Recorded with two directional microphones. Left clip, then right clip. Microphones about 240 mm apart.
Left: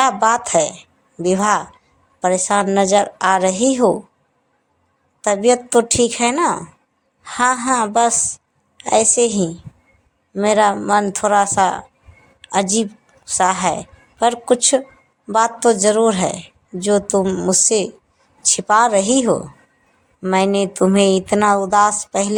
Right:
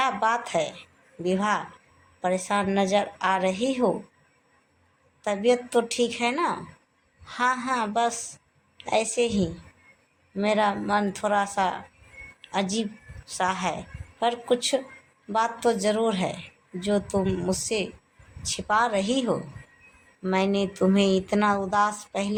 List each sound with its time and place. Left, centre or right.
0.0 s a woman's voice: left
5.2 s a woman's voice: left